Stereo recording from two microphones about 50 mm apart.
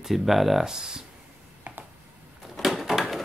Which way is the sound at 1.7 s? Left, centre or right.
Right.